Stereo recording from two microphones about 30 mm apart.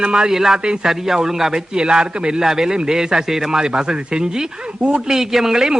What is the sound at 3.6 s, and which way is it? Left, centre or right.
Speech, right.